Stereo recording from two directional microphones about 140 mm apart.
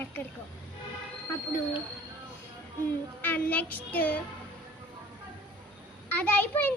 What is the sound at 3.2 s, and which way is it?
A child's voice, 10° left (ahead or behind).